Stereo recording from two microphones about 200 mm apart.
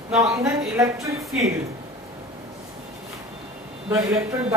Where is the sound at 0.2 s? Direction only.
15° right (ahead or behind).